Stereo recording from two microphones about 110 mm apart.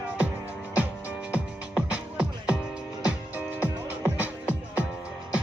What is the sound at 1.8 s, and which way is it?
Music, 10° right (ahead or behind).